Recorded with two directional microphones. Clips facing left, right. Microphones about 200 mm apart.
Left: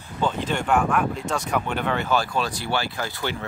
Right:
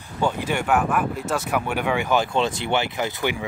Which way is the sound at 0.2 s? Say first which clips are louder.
Right 1 dB; 10° right (ahead or behind).